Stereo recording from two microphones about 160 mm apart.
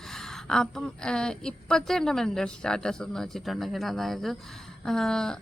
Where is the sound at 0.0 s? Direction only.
Centre (ahead or behind).